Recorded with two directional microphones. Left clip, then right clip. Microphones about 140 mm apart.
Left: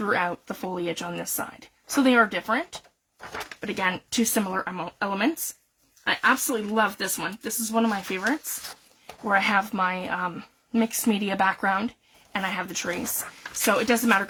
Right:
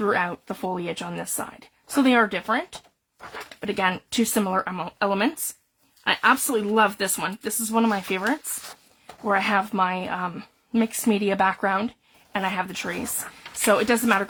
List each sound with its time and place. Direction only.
0.0 s a woman's voice: 30° right (ahead or behind); by 8.2 s 50° right (ahead or behind)
9.2 s speech: 30° right (ahead or behind)